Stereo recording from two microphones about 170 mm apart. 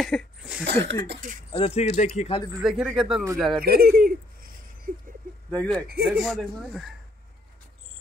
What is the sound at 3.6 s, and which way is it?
Speech, 65° right (ahead or behind).